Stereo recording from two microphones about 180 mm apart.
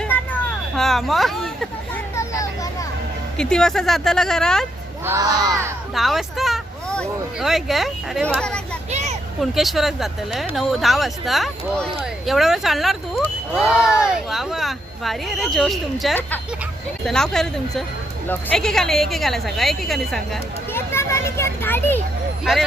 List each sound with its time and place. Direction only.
0.8 s speech: centre (ahead or behind)
2.1 s a sound: 15° left (ahead or behind)
3.3 s speech: 5° left (ahead or behind)
5.0 s speech: 20° right (ahead or behind)
5.9 s speech: centre (ahead or behind)
8.9 s a sound: 40° right (ahead or behind)
9.4 s speech: centre (ahead or behind)
20.7 s a child's voice: 15° left (ahead or behind)